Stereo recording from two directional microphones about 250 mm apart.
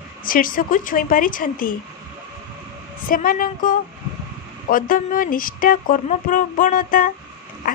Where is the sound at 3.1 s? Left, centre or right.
Left.